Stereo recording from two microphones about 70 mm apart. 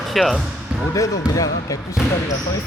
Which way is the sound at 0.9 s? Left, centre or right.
Left.